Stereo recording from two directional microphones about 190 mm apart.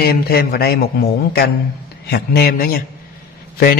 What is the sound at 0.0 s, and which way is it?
Speech, 55° left (ahead or behind).